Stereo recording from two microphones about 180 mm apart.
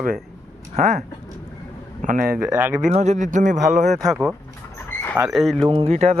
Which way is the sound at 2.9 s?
40° right (ahead or behind).